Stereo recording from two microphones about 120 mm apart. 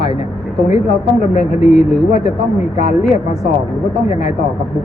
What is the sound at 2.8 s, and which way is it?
Speech, 70° left (ahead or behind).